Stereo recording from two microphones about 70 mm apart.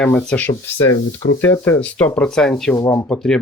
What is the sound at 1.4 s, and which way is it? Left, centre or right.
Speech, left.